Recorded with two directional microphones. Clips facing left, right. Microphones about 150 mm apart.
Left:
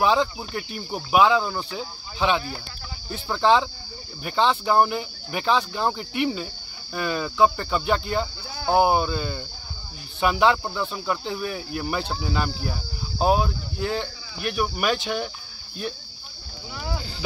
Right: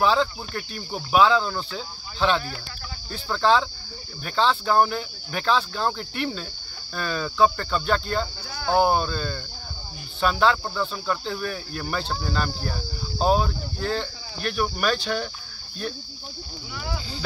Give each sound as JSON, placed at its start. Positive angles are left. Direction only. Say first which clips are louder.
{"t": 0.0, "sound": "speech", "louder": "left 1 dB", "side_deg": 15}